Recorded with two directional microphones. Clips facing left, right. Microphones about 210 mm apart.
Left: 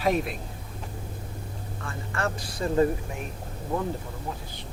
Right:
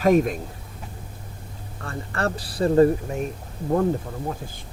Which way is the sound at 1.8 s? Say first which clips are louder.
Right 4 dB; 35° right (ahead or behind).